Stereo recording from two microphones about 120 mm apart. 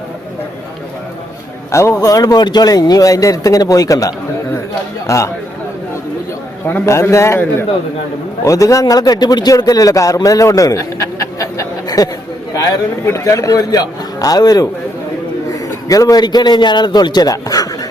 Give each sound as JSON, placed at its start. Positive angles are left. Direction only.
{"t": 1.7, "sound": "a man's voice", "side_deg": 25}
{"t": 6.7, "sound": "a man's voice", "side_deg": 20}
{"t": 8.4, "sound": "a man's voice", "side_deg": 25}